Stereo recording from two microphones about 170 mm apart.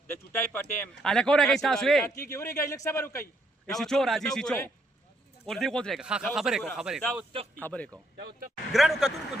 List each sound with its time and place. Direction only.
0.1 s speech: 10° left (ahead or behind)
2.0 s a man's voice: 15° left (ahead or behind)
3.7 s speech: 5° left (ahead or behind)
7.6 s a man's voice: 10° left (ahead or behind)